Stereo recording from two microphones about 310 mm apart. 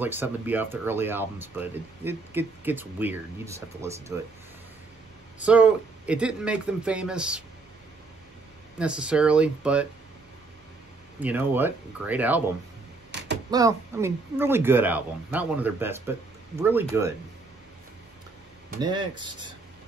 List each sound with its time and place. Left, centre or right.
0.0 s a man's voice: centre
5.4 s a man's voice: centre
8.7 s a man's voice: centre
11.1 s a man's voice: centre
13.1 s a sound: right
13.5 s speech: centre
18.8 s speech: centre